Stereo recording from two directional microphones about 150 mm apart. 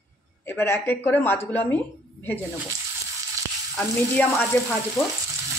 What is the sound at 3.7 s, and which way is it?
Speech, 10° left (ahead or behind).